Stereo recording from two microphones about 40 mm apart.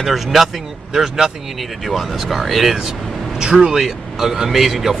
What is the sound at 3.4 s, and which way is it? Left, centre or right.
Speech, centre.